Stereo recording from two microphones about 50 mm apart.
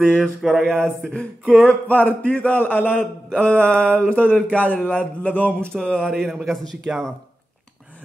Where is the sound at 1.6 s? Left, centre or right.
Left.